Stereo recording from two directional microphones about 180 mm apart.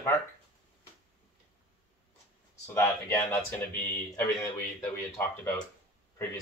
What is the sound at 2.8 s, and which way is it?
Speech, 10° left (ahead or behind).